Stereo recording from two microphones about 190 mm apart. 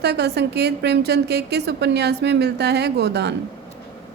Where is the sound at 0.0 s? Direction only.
60° right (ahead or behind).